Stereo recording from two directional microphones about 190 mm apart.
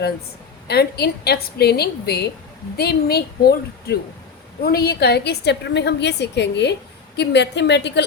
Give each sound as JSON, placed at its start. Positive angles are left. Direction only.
{"t": 0.7, "sound": "a woman's voice", "side_deg": 60}